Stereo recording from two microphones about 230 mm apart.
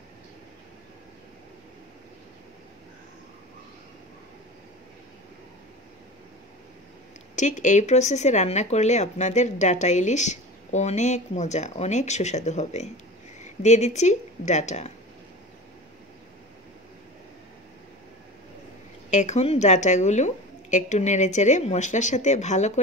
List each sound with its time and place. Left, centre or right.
7.3 s speech: left
19.0 s speech: left